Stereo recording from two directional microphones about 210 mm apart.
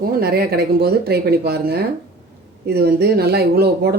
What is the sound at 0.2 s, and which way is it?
Speech, 50° right (ahead or behind).